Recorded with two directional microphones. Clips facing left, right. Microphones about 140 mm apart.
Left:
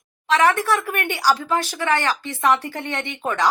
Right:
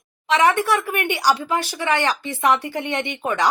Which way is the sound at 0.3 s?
15° right (ahead or behind).